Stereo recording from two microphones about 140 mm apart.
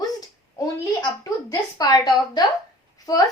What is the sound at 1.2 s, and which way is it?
A woman's voice, 25° left (ahead or behind).